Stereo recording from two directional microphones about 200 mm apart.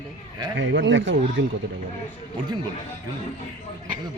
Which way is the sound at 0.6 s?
65° right (ahead or behind).